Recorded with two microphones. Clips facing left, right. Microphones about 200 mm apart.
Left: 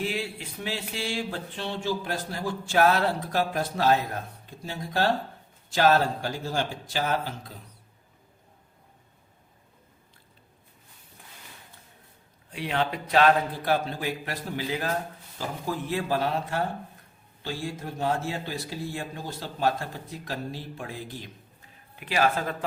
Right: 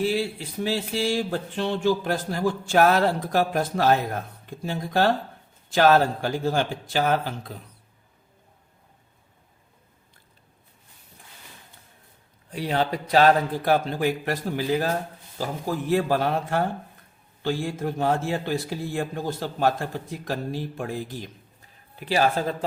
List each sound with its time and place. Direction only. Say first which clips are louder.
0.0 s speech: right 6 dB; 35° right (ahead or behind); by 5.0 s 55° right (ahead or behind)
6.2 s speech: right 5 dB; 55° right (ahead or behind)
12.5 s a man's voice: right 3 dB; 40° right (ahead or behind)
21.9 s a man's voice: right 3 dB; 35° right (ahead or behind)